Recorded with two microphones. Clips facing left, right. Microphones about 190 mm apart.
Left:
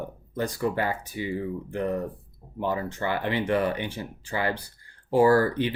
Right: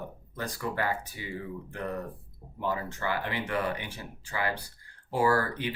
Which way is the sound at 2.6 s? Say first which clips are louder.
Left 4 dB; 25° left (ahead or behind).